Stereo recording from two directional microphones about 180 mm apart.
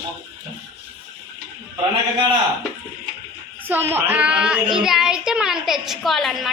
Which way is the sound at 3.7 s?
10° right (ahead or behind).